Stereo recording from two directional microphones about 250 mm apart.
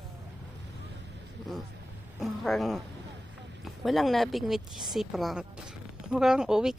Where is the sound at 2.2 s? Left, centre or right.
Centre.